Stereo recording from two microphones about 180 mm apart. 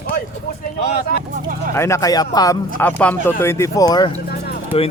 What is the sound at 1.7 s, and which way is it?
Speech, 15° left (ahead or behind).